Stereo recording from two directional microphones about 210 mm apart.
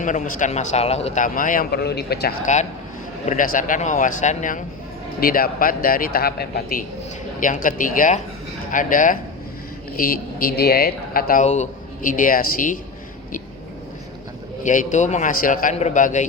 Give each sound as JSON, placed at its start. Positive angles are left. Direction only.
{"t": 0.0, "sound": "a man's voice", "side_deg": 35}
{"t": 3.2, "sound": "a man's voice", "side_deg": 40}
{"t": 14.6, "sound": "a man's voice", "side_deg": 35}